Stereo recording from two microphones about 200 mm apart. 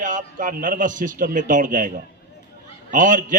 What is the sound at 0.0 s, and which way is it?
A man's voice, 40° right (ahead or behind).